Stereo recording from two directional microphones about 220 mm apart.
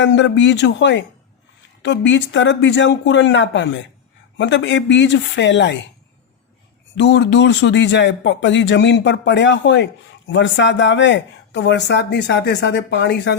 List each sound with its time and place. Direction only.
0.0 s speech: 55° left (ahead or behind)
6.9 s speech: 50° left (ahead or behind)